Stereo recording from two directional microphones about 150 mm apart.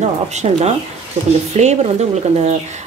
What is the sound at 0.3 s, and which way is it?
Speech, 50° right (ahead or behind).